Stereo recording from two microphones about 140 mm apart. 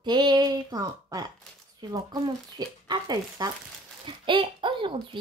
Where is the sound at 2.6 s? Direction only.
30° right (ahead or behind).